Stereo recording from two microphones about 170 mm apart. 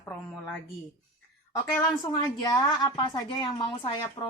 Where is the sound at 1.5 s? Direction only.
25° left (ahead or behind).